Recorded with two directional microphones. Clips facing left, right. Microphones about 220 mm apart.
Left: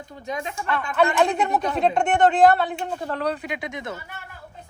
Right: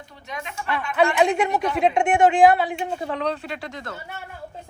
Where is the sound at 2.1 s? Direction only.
Centre (ahead or behind); by 3.9 s 20° left (ahead or behind).